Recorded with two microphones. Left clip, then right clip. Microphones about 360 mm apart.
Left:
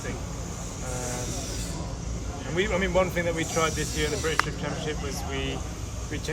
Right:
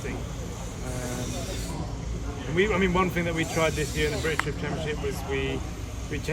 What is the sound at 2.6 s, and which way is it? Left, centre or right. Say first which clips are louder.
Speech: right 1 dB; centre.